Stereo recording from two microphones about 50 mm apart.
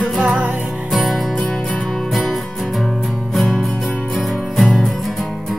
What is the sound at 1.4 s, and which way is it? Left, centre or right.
Music, centre.